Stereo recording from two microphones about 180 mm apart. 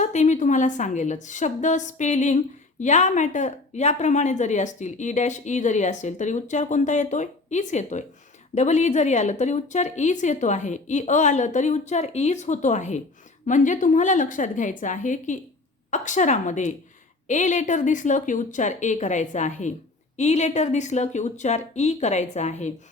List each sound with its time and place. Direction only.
0.0 s a woman's voice: 40° left (ahead or behind)